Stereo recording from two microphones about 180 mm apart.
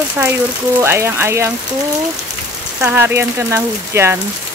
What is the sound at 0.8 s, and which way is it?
Speech, 15° right (ahead or behind).